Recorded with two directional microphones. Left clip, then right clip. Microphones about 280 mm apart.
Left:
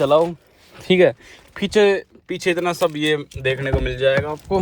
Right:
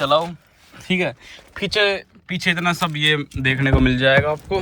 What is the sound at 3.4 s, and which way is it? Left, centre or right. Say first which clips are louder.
Speech: right 5 dB; centre.